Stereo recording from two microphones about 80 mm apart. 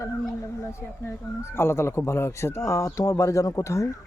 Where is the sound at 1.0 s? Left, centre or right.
Left.